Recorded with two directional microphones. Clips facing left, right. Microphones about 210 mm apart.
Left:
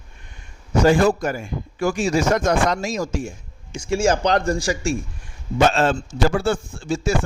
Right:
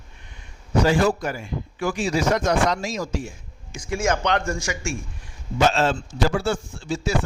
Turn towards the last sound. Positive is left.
turn(degrees=50)  # may be behind; listen again after turning